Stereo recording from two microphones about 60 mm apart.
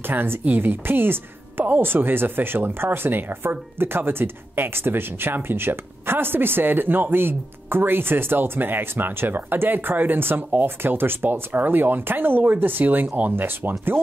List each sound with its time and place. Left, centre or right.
0.0 s a woman's voice: right